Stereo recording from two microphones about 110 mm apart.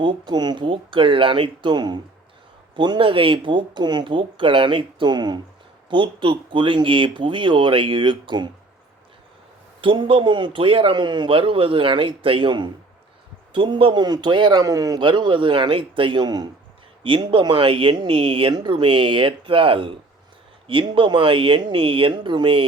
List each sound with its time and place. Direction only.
0.0 s a man's voice: 40° right (ahead or behind)
9.8 s a man's voice: 50° right (ahead or behind); by 15.0 s 35° right (ahead or behind)
15.0 s a man's voice: 45° right (ahead or behind)